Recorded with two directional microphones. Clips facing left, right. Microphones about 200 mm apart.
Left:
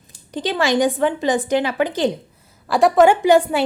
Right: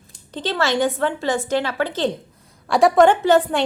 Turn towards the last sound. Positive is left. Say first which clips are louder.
# left 2 dB
turn(degrees=10)  # may be behind; listen again after turning